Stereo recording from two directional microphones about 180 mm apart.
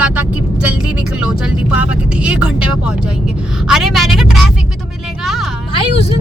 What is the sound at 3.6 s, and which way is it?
Speech, centre (ahead or behind).